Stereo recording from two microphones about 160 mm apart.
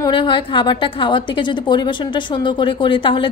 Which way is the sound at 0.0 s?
30° left (ahead or behind).